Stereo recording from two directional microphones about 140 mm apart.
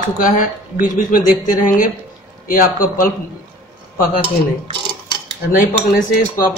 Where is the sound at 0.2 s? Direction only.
70° left (ahead or behind).